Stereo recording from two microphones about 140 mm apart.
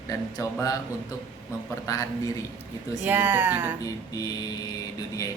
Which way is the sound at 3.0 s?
15° right (ahead or behind).